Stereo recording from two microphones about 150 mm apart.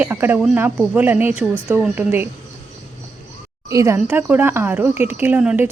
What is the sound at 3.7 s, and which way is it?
Speech, 20° right (ahead or behind).